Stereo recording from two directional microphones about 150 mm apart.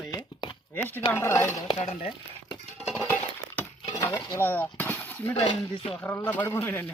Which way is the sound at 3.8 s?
25° left (ahead or behind).